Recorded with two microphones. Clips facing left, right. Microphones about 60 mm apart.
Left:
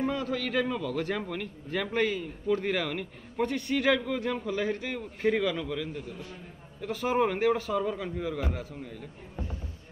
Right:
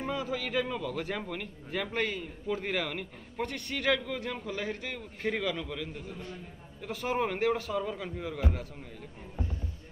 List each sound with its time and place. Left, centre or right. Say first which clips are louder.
0.0 s a man's voice: left 3 dB; centre